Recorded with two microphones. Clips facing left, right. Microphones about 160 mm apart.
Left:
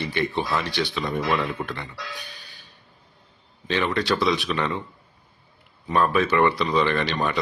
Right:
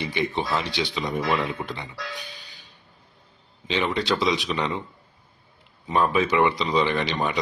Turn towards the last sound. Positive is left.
turn(degrees=-15)  # may be behind; listen again after turning